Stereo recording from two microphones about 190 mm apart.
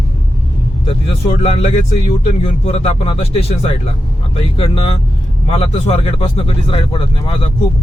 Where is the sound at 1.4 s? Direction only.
30° left (ahead or behind).